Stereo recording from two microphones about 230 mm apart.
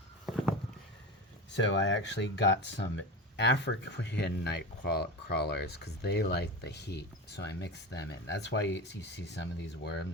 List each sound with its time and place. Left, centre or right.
1.5 s speech: left